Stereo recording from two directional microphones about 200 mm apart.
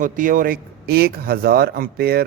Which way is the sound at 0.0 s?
45° right (ahead or behind).